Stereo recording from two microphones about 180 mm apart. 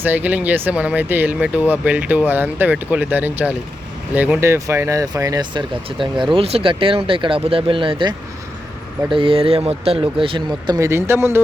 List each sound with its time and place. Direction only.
0.0 s speech: 10° right (ahead or behind); by 8.1 s 30° right (ahead or behind)
9.1 s speech: 30° right (ahead or behind); by 11.4 s 15° right (ahead or behind)